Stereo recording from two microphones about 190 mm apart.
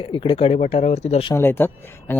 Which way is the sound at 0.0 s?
25° left (ahead or behind).